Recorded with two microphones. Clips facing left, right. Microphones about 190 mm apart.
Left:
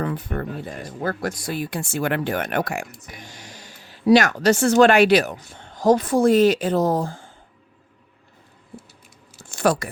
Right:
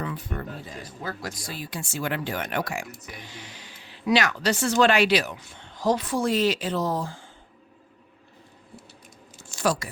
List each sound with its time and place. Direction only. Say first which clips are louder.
0.0 s speech: left 6 dB; 55° left (ahead or behind)
9.5 s speech: left 5 dB; 55° left (ahead or behind)